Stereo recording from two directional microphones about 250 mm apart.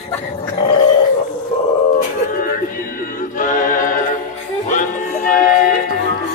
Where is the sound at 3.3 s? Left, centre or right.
Left.